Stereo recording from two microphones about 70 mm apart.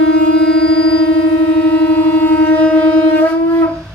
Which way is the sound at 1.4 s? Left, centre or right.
Centre.